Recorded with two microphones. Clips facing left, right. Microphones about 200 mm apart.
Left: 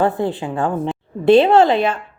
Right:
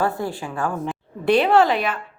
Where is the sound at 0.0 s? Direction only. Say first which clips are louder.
Left 5 dB; 20° left (ahead or behind).